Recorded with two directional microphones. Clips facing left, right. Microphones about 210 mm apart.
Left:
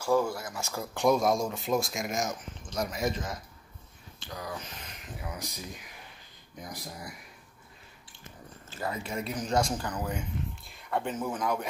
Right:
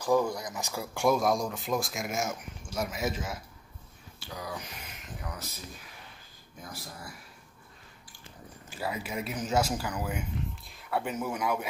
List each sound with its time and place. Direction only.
0.3 s speech: 20° right (ahead or behind)
1.0 s speech: centre (ahead or behind)
5.0 s speech: 10° left (ahead or behind)
6.6 s speech: 15° left (ahead or behind)
8.6 s speech: 10° right (ahead or behind)